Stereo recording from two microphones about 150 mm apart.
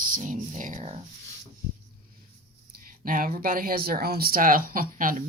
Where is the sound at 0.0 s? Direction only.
60° right (ahead or behind).